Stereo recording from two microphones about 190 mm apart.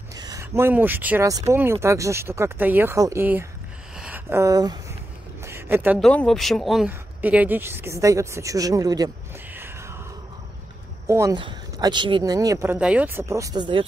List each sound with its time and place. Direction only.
0.1 s speech: 20° right (ahead or behind)
3.9 s a sound: 5° right (ahead or behind)
5.9 s speech: 5° left (ahead or behind); by 9.9 s 15° right (ahead or behind)
11.1 s speech: 15° right (ahead or behind)
12.7 s speech: 5° right (ahead or behind); by 13.8 s 25° right (ahead or behind)